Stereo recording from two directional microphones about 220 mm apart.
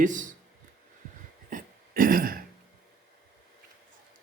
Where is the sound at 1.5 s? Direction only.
40° right (ahead or behind).